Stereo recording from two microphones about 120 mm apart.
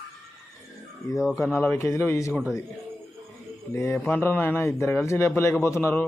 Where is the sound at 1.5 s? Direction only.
20° left (ahead or behind).